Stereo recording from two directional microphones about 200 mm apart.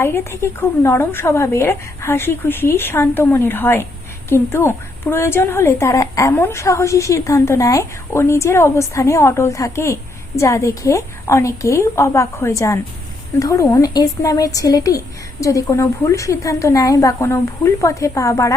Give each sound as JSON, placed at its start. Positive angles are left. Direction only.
{"t": 0.0, "sound": "a woman's voice", "side_deg": 10}